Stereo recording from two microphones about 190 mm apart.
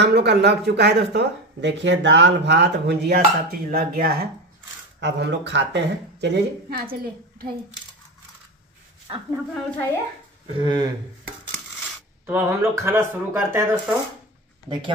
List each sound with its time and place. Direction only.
0.0 s a woman's voice: 60° right (ahead or behind)
3.7 s speech: 50° right (ahead or behind)
5.0 s a woman's voice: 65° right (ahead or behind); by 7.5 s 50° right (ahead or behind)
9.5 s a woman's voice: 10° left (ahead or behind)
10.4 s speech: 25° right (ahead or behind)
12.3 s speech: 10° right (ahead or behind)